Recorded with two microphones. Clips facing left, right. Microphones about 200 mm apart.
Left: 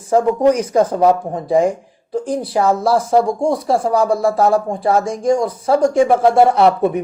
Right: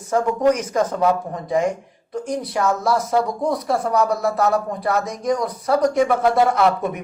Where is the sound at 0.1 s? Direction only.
30° left (ahead or behind).